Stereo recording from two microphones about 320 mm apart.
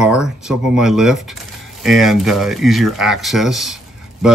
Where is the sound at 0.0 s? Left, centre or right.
Centre.